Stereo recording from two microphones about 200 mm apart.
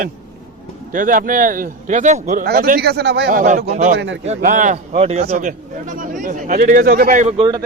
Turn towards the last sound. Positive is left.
turn(degrees=-30)  # may be behind; listen again after turning